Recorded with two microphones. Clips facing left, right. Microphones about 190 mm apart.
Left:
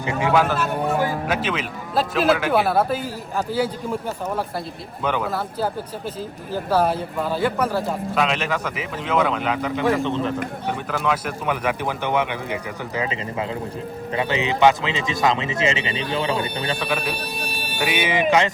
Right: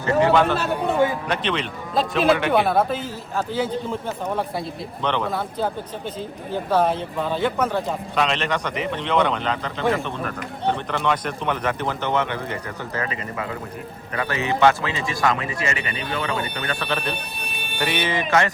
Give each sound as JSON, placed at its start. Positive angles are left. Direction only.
{"t": 0.3, "sound": "speech", "side_deg": 5}
{"t": 5.0, "sound": "speech", "side_deg": 5}
{"t": 10.9, "sound": "speech", "side_deg": 5}
{"t": 16.8, "sound": "speech", "side_deg": 10}
{"t": 17.4, "sound": "a sound", "side_deg": 35}
{"t": 17.7, "sound": "speech", "side_deg": 10}